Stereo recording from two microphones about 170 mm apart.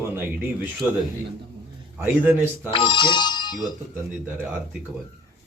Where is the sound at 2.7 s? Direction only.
30° left (ahead or behind).